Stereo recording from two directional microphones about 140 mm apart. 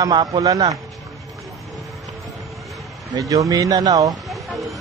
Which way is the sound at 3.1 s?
25° right (ahead or behind).